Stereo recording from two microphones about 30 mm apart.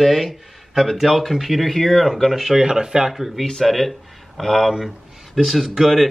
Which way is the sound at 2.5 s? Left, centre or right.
Right.